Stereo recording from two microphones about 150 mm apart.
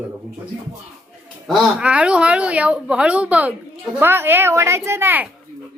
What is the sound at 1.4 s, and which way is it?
A woman's voice, 5° right (ahead or behind).